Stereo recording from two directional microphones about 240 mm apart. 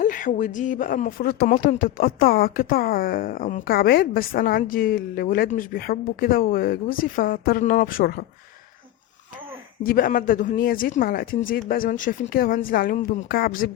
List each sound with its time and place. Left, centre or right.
0.0 s speech: left
9.8 s speech: left